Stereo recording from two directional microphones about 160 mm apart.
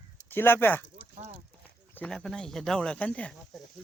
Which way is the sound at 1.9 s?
10° left (ahead or behind).